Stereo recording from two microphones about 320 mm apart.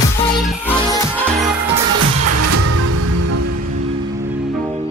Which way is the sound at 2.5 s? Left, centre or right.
Right.